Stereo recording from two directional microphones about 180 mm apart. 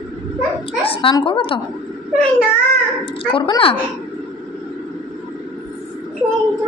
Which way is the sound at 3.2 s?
30° left (ahead or behind).